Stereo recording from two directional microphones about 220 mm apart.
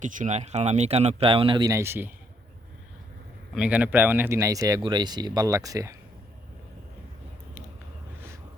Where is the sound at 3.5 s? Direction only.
5° right (ahead or behind).